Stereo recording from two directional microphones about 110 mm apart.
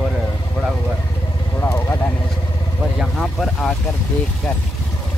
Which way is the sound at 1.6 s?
20° left (ahead or behind).